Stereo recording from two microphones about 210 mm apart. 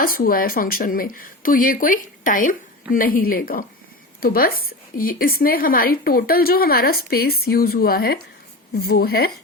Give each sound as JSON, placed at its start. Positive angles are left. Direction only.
{"t": 0.0, "sound": "a woman's voice", "side_deg": 45}